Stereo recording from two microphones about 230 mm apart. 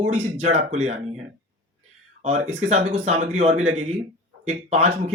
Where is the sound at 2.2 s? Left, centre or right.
Right.